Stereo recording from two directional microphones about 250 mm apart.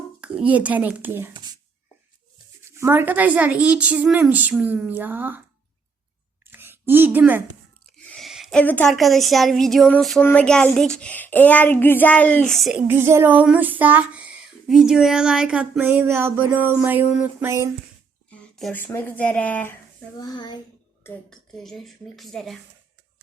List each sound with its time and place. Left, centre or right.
0.2 s a child's voice: centre
2.7 s a woman's voice: centre
6.4 s a sound: centre
8.0 s speech: centre
18.3 s speech: centre
20.2 s a child's voice: centre
21.0 s speech: centre